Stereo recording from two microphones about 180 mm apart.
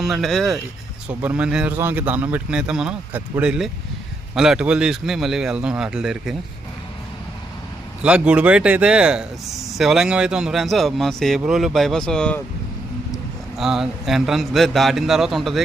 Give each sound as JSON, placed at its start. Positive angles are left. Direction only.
{"t": 0.0, "sound": "speech", "side_deg": 0}
{"t": 8.0, "sound": "speech", "side_deg": -5}
{"t": 13.6, "sound": "speech", "side_deg": 0}